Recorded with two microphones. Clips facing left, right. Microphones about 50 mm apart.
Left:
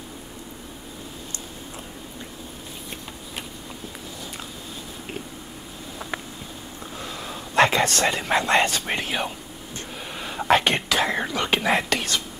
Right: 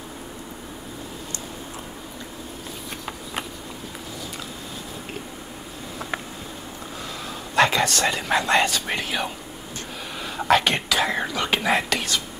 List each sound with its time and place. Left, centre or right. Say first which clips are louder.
7.5 s a sound: left 1 dB; left
8.2 s speech: even; left
10.5 s speech: even; left
11.1 s speech: even; centre
11.5 s speech: even; left
11.9 s whispering: even; left